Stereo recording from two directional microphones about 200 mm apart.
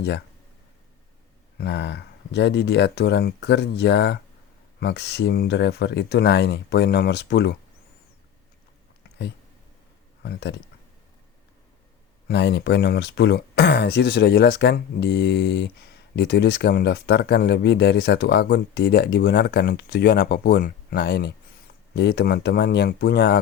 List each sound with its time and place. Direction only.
1.5 s speech: 55° left (ahead or behind)
12.3 s speech: 60° left (ahead or behind)